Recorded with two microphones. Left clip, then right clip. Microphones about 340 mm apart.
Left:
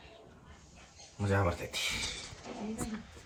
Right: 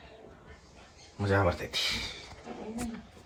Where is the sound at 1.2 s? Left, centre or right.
Centre.